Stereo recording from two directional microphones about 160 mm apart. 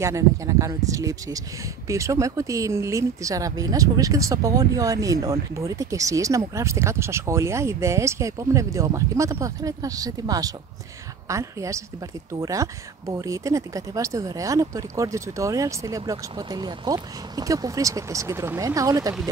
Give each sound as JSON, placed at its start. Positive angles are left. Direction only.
{"t": 0.0, "sound": "speech", "side_deg": -20}